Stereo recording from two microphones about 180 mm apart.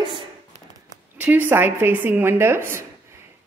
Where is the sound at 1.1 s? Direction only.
10° right (ahead or behind).